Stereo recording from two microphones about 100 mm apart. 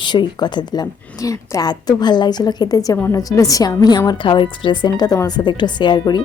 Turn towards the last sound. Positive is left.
turn(degrees=45)  # may be behind; listen again after turning